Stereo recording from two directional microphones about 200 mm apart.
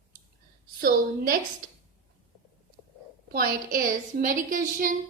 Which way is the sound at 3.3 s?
45° right (ahead or behind).